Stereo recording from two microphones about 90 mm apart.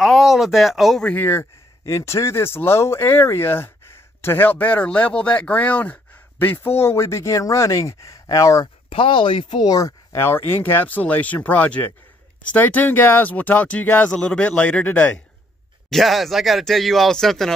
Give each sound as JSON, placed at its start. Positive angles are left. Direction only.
{"t": 0.0, "sound": "speech", "side_deg": 0}
{"t": 1.1, "sound": "speech", "side_deg": 25}
{"t": 8.9, "sound": "speech", "side_deg": 75}
{"t": 9.7, "sound": "speech", "side_deg": 40}
{"t": 10.1, "sound": "speech", "side_deg": 25}
{"t": 15.9, "sound": "speech", "side_deg": 0}